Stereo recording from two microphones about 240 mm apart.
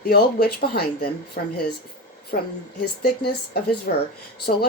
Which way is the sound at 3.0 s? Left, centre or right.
Left.